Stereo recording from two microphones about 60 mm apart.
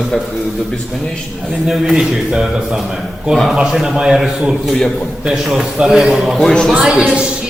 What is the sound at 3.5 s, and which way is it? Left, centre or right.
A man's voice, centre.